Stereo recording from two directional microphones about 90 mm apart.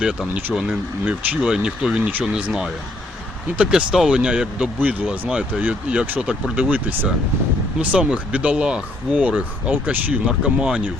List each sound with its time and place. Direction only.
0.0 s speech: 10° right (ahead or behind)